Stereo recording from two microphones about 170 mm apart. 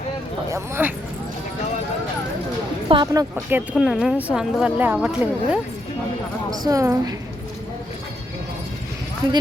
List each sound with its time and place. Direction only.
0.5 s speech: 15° right (ahead or behind)
2.9 s speech: 25° right (ahead or behind)
3.5 s speech: 5° right (ahead or behind)
6.5 s speech: 20° right (ahead or behind)